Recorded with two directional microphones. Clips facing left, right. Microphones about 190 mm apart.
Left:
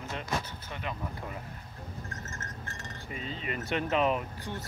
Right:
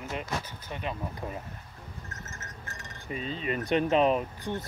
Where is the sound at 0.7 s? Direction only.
20° right (ahead or behind).